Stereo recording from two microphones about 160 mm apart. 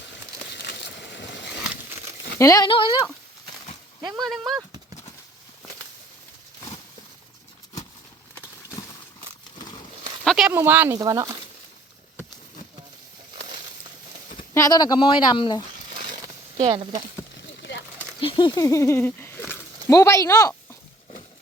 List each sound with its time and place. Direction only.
0.5 s crushing: 90° left
1.6 s crumpling: 10° right (ahead or behind)
2.4 s speech: 20° left (ahead or behind)
2.6 s speech: 30° left (ahead or behind)
4.2 s speech: centre (ahead or behind)
9.6 s a sound: 25° left (ahead or behind)
10.2 s a sound: centre (ahead or behind)
10.5 s speech: 15° right (ahead or behind)
14.5 s speech: 20° left (ahead or behind)
16.1 s a sound: 30° right (ahead or behind)
18.2 s speech: 30° left (ahead or behind); by 19.3 s 15° left (ahead or behind)
19.5 s a sound: 15° left (ahead or behind)